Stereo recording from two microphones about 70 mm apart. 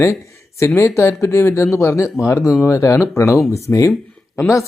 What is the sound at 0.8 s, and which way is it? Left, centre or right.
Speech, left.